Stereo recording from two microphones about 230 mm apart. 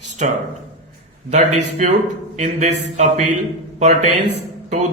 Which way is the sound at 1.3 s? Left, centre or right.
Right.